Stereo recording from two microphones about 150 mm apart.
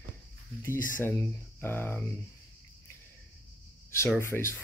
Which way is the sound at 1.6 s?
15° left (ahead or behind).